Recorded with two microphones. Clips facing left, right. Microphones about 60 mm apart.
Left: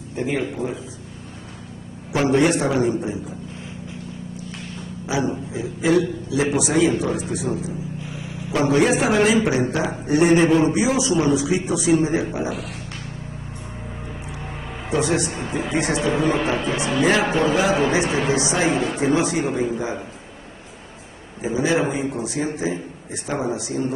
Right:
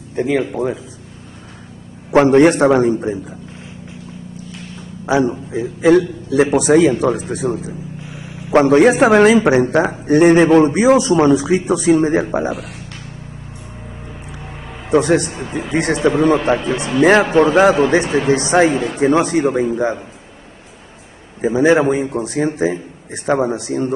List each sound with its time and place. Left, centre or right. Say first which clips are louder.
0.1 s a man's voice: right 6 dB; right
2.1 s a man's voice: right 8 dB; right
5.1 s a man's voice: right 7 dB; right
14.9 s a man's voice: right 7 dB; right
16.7 s speech: right 3 dB; centre
17.0 s a man's voice: right 8 dB; right
21.4 s a man's voice: right 8 dB; right